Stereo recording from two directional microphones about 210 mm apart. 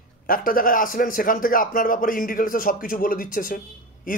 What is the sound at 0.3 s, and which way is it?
Speech, 40° left (ahead or behind).